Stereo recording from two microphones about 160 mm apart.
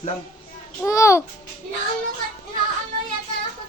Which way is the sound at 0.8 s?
20° left (ahead or behind).